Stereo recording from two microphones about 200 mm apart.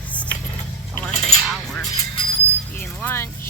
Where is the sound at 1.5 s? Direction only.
Centre (ahead or behind).